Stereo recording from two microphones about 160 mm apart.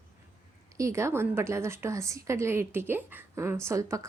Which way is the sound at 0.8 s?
20° right (ahead or behind).